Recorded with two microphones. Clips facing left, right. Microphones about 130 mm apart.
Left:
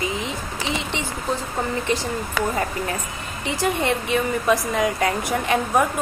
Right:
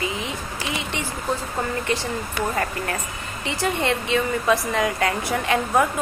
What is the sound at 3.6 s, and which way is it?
A woman's voice, 15° left (ahead or behind).